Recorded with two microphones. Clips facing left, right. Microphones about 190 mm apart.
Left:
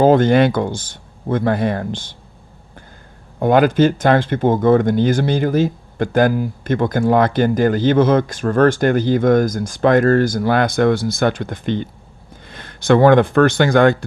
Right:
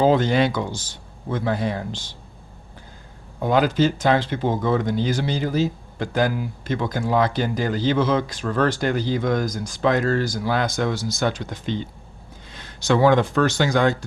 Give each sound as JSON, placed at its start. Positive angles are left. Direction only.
{"t": 0.0, "sound": "speech", "side_deg": 50}
{"t": 3.4, "sound": "speech", "side_deg": 55}